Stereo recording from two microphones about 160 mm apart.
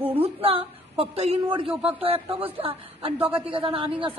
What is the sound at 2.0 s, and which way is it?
A woman's voice, 35° right (ahead or behind).